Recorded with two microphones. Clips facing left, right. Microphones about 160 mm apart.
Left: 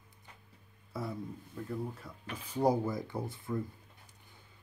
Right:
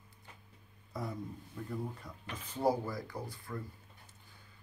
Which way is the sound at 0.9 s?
5° left (ahead or behind).